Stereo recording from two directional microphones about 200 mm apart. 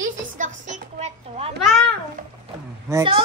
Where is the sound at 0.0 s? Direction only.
40° right (ahead or behind).